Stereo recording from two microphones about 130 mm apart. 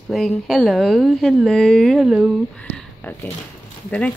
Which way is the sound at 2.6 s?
10° left (ahead or behind).